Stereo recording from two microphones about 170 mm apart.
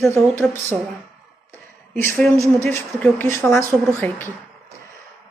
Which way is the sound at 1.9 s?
10° left (ahead or behind).